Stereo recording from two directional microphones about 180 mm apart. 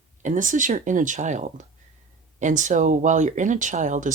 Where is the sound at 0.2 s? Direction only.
45° right (ahead or behind).